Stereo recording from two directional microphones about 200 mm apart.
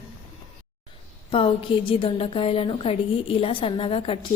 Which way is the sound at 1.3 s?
25° left (ahead or behind).